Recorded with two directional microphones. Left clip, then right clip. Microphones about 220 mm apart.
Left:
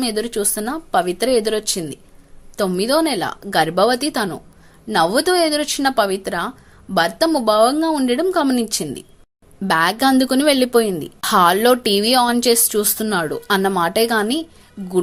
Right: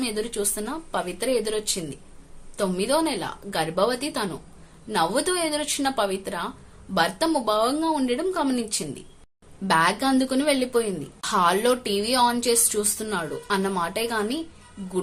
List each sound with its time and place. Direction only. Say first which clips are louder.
0.0 s a woman's voice: left 6 dB; 30° left (ahead or behind)